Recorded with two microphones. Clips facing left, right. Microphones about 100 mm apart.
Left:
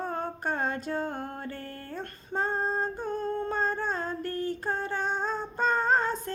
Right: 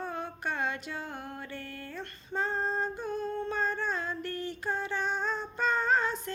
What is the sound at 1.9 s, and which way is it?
Female singing, 40° left (ahead or behind).